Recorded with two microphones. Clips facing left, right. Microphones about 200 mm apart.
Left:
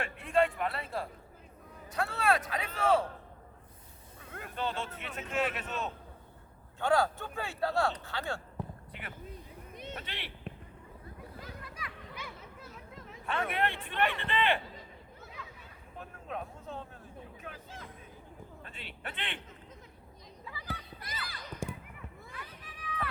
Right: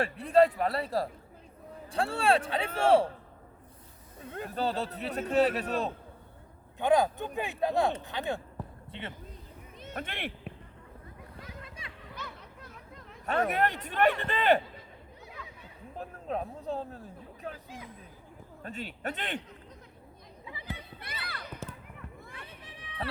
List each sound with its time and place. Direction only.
0.0 s a man's voice: 35° right (ahead or behind)
4.2 s a man's voice: 30° right (ahead or behind)
6.7 s speech: 20° right (ahead or behind)
9.7 s a sound: 20° left (ahead or behind)
10.0 s speech: 50° right (ahead or behind)
12.1 s a sound: 5° left (ahead or behind)
13.2 s a man's voice: 40° right (ahead or behind)
16.0 s a sound: 35° right (ahead or behind)
17.4 s chatter: 30° right (ahead or behind)
18.6 s a man's voice: 40° right (ahead or behind)
20.4 s chatter: 20° right (ahead or behind)
21.1 s a sound: 60° right (ahead or behind)
22.4 s children playing: 25° right (ahead or behind)